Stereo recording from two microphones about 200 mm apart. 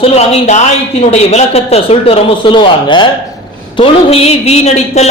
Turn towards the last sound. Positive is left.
turn(degrees=35)  # may be behind; listen again after turning